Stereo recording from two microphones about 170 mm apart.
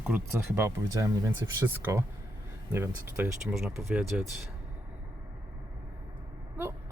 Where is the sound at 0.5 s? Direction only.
15° right (ahead or behind).